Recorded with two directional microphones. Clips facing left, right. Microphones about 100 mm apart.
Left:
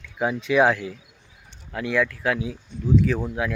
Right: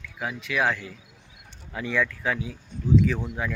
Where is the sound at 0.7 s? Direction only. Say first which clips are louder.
Left 6 dB; 5° left (ahead or behind).